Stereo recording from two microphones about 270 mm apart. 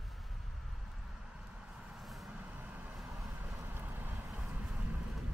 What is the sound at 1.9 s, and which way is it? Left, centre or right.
Vehicle, centre.